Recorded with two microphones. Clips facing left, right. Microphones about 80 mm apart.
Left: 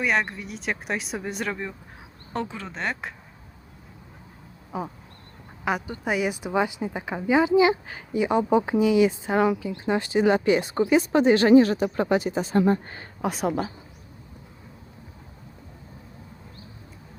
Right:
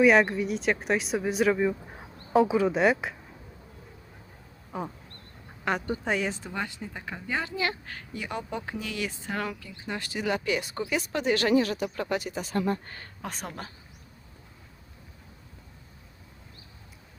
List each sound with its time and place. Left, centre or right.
0.0 s speech: centre
4.7 s speech: centre; by 13.1 s left
13.2 s speech: centre